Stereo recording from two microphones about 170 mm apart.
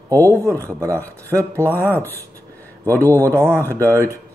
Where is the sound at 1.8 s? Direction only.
10° left (ahead or behind).